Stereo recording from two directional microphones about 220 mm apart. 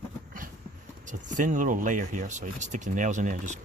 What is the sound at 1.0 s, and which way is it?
Speech, 35° right (ahead or behind).